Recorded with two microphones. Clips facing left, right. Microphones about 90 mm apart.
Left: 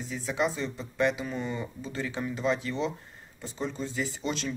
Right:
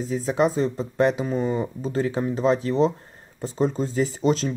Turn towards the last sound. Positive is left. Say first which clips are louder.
# right 10 dB
turn(degrees=-35)  # may be behind; listen again after turning